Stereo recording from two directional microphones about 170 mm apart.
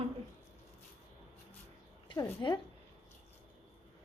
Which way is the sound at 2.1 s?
25° left (ahead or behind).